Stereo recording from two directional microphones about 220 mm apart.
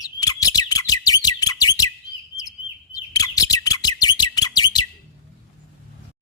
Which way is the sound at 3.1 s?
15° left (ahead or behind).